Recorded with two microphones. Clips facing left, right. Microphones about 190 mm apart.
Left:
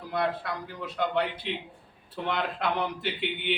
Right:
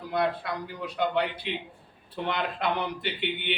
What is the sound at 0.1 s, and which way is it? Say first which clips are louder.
A man's voice: right 1 dB; centre (ahead or behind).